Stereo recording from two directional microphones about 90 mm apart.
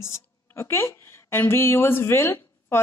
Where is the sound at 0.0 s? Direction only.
30° left (ahead or behind).